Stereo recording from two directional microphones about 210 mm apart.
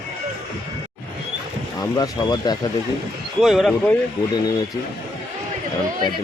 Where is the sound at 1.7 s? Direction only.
20° left (ahead or behind).